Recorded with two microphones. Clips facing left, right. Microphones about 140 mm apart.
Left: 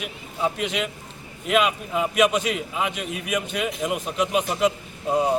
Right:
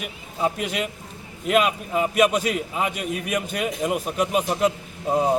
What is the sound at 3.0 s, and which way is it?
Speech, 50° right (ahead or behind).